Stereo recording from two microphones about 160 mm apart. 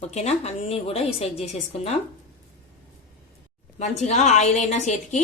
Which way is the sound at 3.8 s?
45° left (ahead or behind).